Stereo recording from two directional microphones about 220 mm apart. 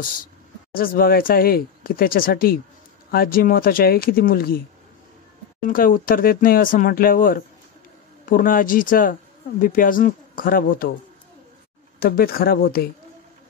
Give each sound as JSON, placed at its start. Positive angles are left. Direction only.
{"t": 0.7, "sound": "speech", "side_deg": 40}
{"t": 5.6, "sound": "speech", "side_deg": 40}
{"t": 12.0, "sound": "speech", "side_deg": 40}